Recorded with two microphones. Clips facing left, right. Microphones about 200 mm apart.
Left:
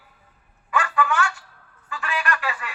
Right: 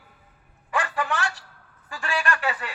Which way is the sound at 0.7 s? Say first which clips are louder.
Left 4 dB; 35° right (ahead or behind).